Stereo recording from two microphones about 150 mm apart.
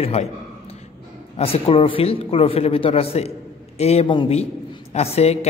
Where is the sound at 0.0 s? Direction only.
40° left (ahead or behind).